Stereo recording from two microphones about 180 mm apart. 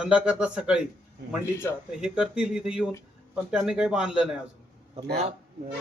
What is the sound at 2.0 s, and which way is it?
Speech, 5° right (ahead or behind).